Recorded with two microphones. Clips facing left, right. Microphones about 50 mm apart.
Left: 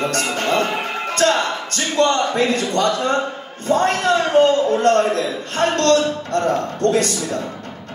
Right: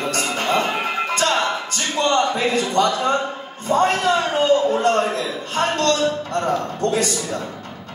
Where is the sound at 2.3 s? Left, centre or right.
Left.